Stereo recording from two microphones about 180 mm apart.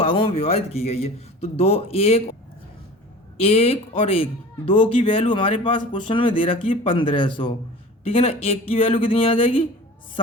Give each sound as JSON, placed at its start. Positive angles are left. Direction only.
{"t": 0.0, "sound": "speech", "side_deg": 30}
{"t": 3.4, "sound": "speech", "side_deg": 35}